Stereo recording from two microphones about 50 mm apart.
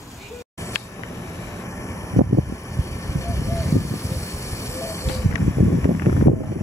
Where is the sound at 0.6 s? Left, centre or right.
Left.